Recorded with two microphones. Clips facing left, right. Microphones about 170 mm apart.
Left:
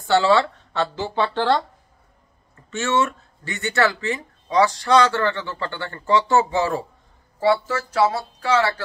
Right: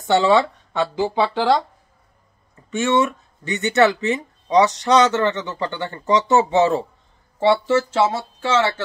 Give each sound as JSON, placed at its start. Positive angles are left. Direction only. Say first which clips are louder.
{"t": 0.0, "sound": "speech", "louder": "right 1 dB", "side_deg": -20}